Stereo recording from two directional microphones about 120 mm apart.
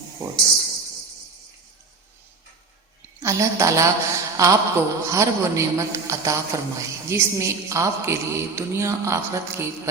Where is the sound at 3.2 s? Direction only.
25° right (ahead or behind).